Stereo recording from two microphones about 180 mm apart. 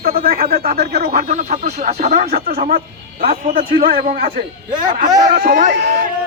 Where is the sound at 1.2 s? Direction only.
40° right (ahead or behind).